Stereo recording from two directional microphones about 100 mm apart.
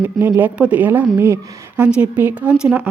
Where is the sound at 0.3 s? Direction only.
15° right (ahead or behind).